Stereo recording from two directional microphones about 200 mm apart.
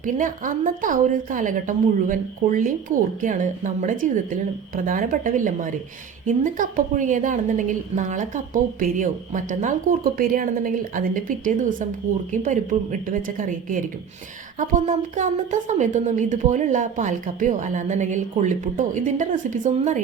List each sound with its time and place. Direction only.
0.0 s a woman's voice: 40° right (ahead or behind)